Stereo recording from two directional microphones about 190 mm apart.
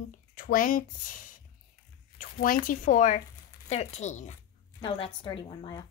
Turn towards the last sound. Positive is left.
turn(degrees=25)  # may be behind; listen again after turning